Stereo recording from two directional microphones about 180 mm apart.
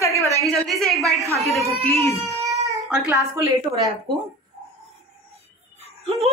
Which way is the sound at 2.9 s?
10° right (ahead or behind).